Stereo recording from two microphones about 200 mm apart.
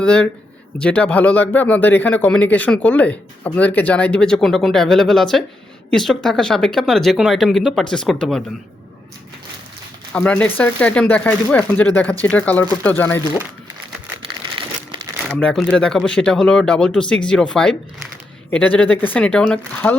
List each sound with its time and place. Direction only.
0.0 s speech: 5° left (ahead or behind)
10.1 s speech: 10° left (ahead or behind)
14.6 s crumpling: 25° right (ahead or behind)
15.3 s speech: 5° left (ahead or behind)